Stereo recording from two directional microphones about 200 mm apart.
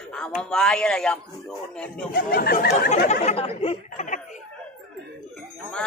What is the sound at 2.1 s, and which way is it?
Speech, 50° left (ahead or behind).